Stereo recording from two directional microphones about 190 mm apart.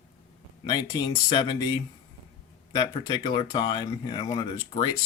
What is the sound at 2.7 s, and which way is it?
Speech, 25° left (ahead or behind).